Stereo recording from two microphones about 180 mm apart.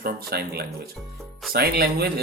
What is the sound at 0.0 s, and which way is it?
A man's voice, 60° right (ahead or behind).